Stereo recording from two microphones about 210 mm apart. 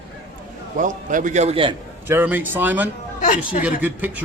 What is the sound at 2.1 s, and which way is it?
Speech, 10° right (ahead or behind).